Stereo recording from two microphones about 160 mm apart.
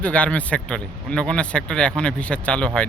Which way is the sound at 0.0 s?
5° left (ahead or behind).